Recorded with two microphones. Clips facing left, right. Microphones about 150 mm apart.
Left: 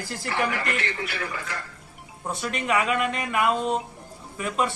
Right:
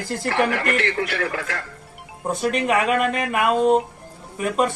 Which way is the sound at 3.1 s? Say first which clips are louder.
Right 4 dB; 55° right (ahead or behind).